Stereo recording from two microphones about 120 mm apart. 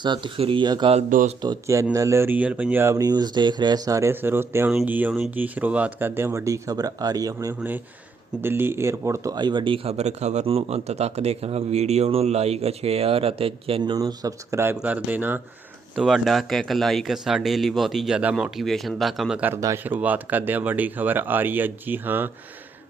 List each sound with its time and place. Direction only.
0.0 s speech: 40° right (ahead or behind)
0.3 s speech: 50° right (ahead or behind)
0.6 s speech: 35° right (ahead or behind)
0.9 s speech: 65° right (ahead or behind)
1.6 s speech: 25° right (ahead or behind)
3.0 s speech: 35° right (ahead or behind)
8.4 s speech: 20° right (ahead or behind); by 13.9 s 50° right (ahead or behind)
13.9 s speech: 30° right (ahead or behind)
14.8 s speech: 10° right (ahead or behind)
16.0 s speech: centre (ahead or behind)
19.5 s speech: 25° right (ahead or behind)
19.8 s speech: 15° right (ahead or behind)